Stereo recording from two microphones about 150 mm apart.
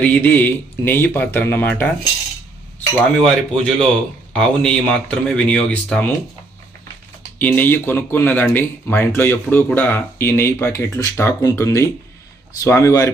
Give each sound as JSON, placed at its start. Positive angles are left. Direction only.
{"t": 0.0, "sound": "speech", "side_deg": 10}
{"t": 3.2, "sound": "speech", "side_deg": 5}
{"t": 7.3, "sound": "speech", "side_deg": 10}